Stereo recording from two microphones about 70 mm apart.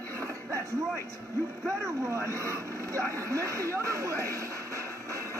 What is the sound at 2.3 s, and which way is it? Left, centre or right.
Speech, right.